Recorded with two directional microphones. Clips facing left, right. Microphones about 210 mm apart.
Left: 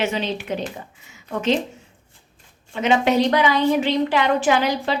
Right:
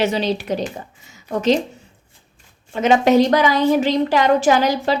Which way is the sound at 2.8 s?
40° right (ahead or behind).